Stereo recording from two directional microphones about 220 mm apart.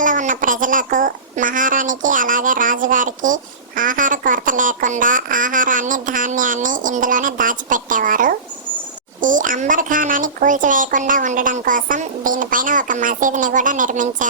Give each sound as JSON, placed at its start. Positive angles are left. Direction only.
{"t": 0.0, "sound": "a child's voice", "side_deg": -35}